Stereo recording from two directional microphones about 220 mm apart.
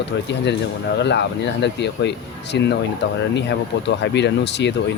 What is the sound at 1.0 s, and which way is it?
Speech, 50° left (ahead or behind).